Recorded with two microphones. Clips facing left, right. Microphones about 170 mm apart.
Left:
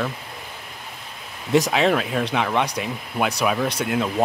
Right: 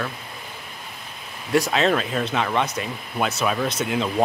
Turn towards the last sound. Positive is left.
turn(degrees=10)  # may be behind; listen again after turning